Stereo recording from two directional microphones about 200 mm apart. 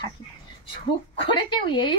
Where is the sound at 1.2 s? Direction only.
25° left (ahead or behind).